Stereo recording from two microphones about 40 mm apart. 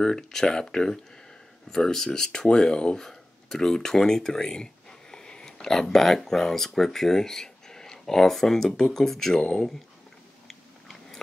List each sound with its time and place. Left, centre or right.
0.0 s speech: centre
3.1 s speech: centre
10.5 s chewing: centre